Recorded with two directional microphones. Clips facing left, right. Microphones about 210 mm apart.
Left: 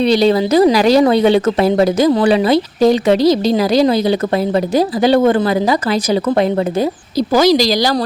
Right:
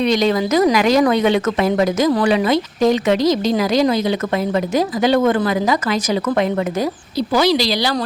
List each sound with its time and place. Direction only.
0.0 s speech: 30° left (ahead or behind)
7.2 s speech: 40° left (ahead or behind)